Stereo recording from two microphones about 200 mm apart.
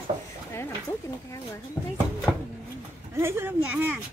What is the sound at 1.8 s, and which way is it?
Speech, 10° left (ahead or behind).